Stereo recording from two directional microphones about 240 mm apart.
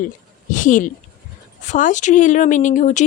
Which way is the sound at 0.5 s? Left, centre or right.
Left.